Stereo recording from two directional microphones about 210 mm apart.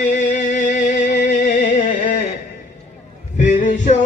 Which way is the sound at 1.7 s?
35° left (ahead or behind).